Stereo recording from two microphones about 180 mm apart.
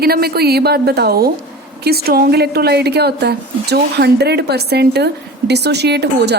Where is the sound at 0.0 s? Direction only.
60° right (ahead or behind).